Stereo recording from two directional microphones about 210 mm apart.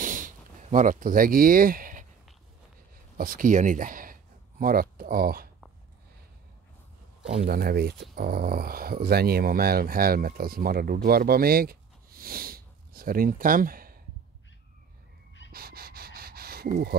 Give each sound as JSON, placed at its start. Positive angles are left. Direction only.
{"t": 0.0, "sound": "a sound", "side_deg": -40}
{"t": 3.2, "sound": "speech", "side_deg": -40}
{"t": 7.2, "sound": "speech", "side_deg": -40}
{"t": 15.5, "sound": "pant", "side_deg": -45}